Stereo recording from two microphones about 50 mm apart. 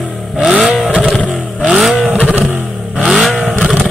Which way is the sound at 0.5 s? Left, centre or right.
Centre.